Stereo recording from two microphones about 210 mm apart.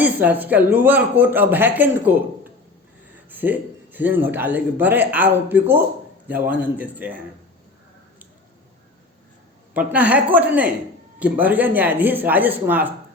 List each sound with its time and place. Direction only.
0.0 s a man's voice: 10° right (ahead or behind)
9.7 s a man's voice: 5° right (ahead or behind)